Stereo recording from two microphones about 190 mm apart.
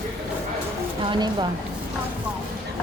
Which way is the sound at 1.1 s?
25° right (ahead or behind).